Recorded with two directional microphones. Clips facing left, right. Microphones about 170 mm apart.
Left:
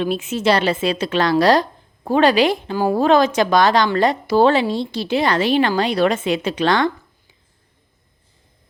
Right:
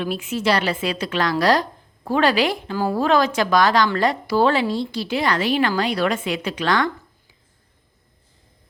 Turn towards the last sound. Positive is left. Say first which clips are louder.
# left 4 dB
turn(degrees=25)  # may be behind; listen again after turning